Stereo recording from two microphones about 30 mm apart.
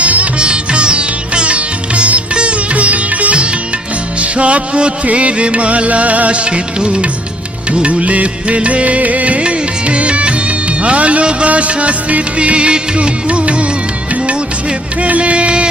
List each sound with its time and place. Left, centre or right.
0.0 s music: right
0.3 s music: right
2.3 s sitar: right
4.2 s music: right
6.3 s music: right
8.0 s music: right
9.4 s music: right
11.4 s music: right
14.2 s music: right
15.0 s music: right